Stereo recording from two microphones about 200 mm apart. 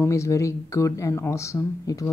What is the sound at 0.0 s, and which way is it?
Speech, 15° left (ahead or behind).